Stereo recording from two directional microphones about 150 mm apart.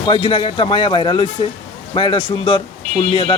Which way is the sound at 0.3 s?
35° left (ahead or behind).